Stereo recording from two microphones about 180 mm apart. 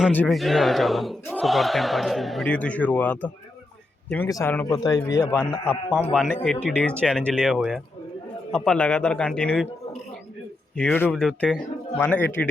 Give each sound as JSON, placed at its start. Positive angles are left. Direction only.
{"t": 0.1, "sound": "speech", "side_deg": 5}
{"t": 6.1, "sound": "speech", "side_deg": 0}
{"t": 10.8, "sound": "speech", "side_deg": 10}